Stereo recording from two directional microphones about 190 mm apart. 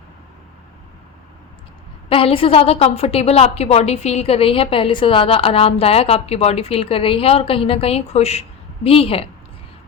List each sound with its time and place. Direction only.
2.0 s a woman's voice: 30° left (ahead or behind)